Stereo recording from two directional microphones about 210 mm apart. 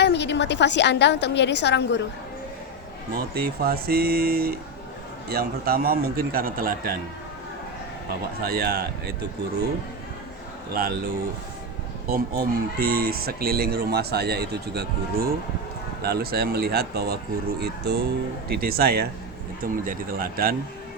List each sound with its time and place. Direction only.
0.0 s a woman's voice: 55° left (ahead or behind)
3.2 s speech: 45° right (ahead or behind)
8.4 s speech: 45° right (ahead or behind)
10.8 s speech: 45° right (ahead or behind)